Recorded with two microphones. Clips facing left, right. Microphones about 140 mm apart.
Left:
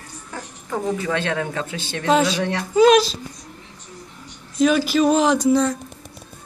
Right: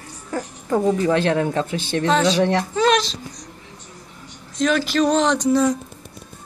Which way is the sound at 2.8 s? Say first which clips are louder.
Left 8 dB; 10° left (ahead or behind).